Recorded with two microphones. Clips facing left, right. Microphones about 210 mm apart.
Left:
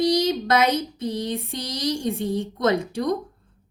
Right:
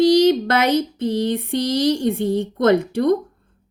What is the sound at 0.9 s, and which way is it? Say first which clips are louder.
Speech: right 6 dB; 55° right (ahead or behind).